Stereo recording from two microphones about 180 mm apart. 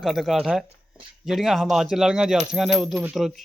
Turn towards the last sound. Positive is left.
turn(degrees=0)  # may be behind; listen again after turning